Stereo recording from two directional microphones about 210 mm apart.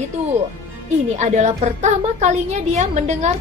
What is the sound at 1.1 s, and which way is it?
A woman's voice, 35° right (ahead or behind).